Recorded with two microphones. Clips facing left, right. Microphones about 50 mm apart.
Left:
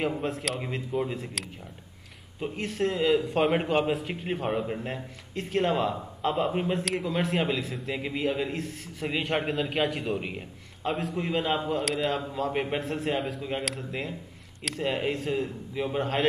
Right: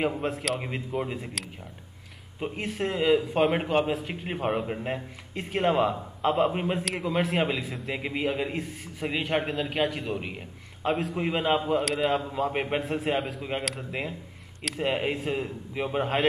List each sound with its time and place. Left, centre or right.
0.1 s a man's voice: centre
0.6 s a man's voice: centre
2.4 s a man's voice: centre
6.8 s a man's voice: centre
11.1 s a man's voice: centre
11.8 s a man's voice: centre
12.1 s a man's voice: centre